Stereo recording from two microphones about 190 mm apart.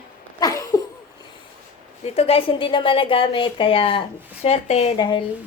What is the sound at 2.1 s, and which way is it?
A woman's voice, 30° left (ahead or behind).